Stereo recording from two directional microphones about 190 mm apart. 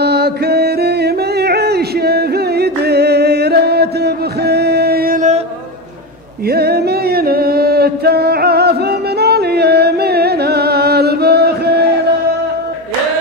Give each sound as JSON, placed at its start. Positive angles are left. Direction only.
{"t": 0.0, "sound": "music", "side_deg": -60}
{"t": 6.4, "sound": "singing", "side_deg": -55}